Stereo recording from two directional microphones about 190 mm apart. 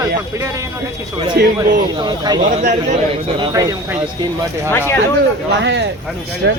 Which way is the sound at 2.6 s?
35° right (ahead or behind).